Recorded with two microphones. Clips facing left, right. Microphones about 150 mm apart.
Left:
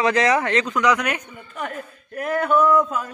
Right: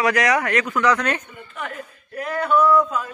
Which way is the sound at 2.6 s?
20° left (ahead or behind).